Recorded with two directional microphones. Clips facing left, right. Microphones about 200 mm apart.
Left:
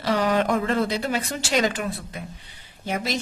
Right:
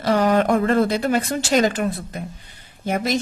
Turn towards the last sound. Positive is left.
turn(degrees=-50)  # may be behind; listen again after turning